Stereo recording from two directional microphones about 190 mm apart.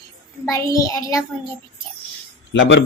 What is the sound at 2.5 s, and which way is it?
Speech, 70° left (ahead or behind).